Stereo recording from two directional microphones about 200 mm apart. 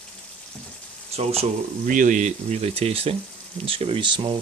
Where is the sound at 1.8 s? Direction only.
40° right (ahead or behind); by 4.4 s 25° right (ahead or behind).